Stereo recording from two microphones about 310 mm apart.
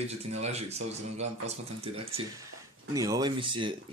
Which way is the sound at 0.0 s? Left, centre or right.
Right.